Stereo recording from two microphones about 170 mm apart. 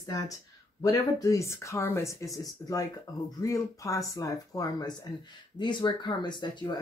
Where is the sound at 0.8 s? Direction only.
20° left (ahead or behind).